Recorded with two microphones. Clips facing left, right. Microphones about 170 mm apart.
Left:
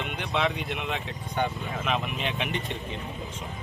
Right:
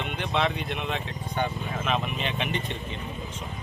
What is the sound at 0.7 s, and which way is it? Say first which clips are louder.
Speech: right 1 dB; 15° left (ahead or behind).